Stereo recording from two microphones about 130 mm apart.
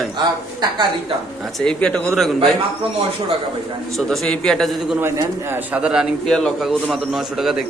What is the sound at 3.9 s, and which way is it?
A man's voice, 5° left (ahead or behind).